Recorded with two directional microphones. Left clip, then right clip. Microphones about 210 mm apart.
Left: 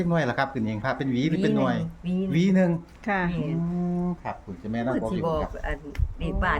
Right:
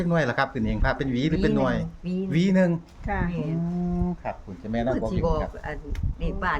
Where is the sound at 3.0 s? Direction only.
45° left (ahead or behind).